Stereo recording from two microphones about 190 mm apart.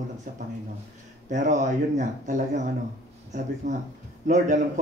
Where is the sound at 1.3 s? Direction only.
40° right (ahead or behind).